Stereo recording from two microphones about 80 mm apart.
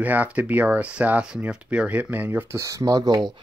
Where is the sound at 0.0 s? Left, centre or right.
Right.